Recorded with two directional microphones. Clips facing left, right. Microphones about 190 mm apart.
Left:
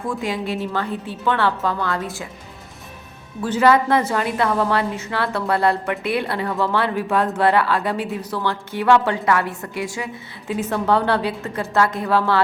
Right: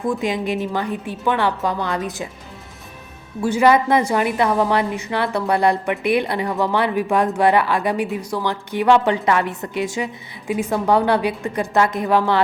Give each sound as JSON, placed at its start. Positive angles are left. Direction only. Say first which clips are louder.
{"t": 0.0, "sound": "a woman's voice", "louder": "right 3 dB", "side_deg": -15}
{"t": 3.4, "sound": "a woman's voice", "louder": "right 1 dB", "side_deg": -10}